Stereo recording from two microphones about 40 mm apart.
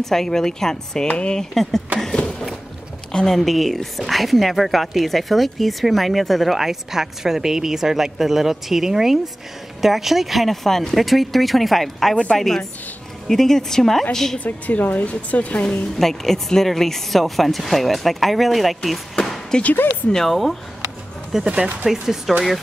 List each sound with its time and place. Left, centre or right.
0.0 s speech: centre
1.0 s speech: left
1.4 s speech: centre
3.1 s speech: centre
3.3 s a woman's voice: centre
14.4 s a woman's voice: left
16.0 s a woman's voice: centre
19.1 s a sound: centre
20.2 s a woman's voice: centre
21.3 s speech: centre